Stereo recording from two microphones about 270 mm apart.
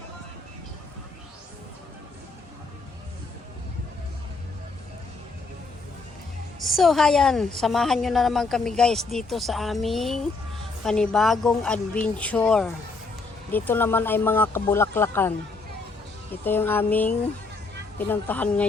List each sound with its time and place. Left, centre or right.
6.6 s a woman's voice: centre
16.3 s a woman's voice: centre